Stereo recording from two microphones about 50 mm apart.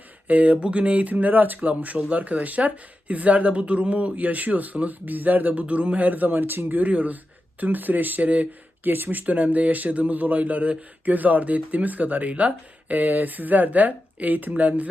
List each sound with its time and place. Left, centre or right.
0.3 s a man's voice: right
6.7 s a man's voice: right